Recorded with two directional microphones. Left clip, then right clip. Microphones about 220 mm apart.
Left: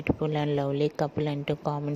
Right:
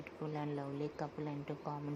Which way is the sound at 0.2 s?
40° left (ahead or behind).